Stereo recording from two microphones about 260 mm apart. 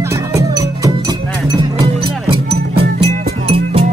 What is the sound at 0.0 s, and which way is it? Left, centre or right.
Music, centre.